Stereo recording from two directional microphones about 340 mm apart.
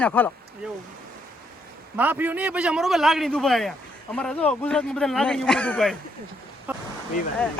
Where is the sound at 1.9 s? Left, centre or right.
Centre.